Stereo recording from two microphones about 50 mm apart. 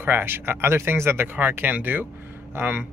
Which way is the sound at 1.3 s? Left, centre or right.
Right.